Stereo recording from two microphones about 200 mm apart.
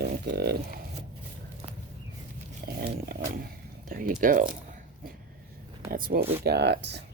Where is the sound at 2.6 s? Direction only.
50° right (ahead or behind).